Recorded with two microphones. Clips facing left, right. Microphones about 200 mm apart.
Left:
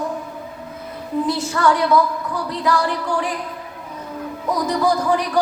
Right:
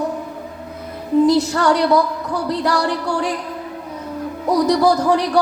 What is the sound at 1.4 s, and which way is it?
Music, 70° right (ahead or behind).